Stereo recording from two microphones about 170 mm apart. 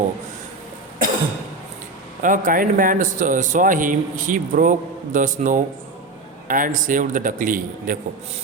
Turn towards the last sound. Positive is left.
turn(degrees=-50)  # may be behind; listen again after turning